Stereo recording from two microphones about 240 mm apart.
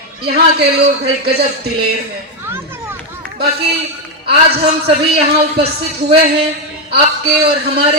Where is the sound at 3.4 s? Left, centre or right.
Right.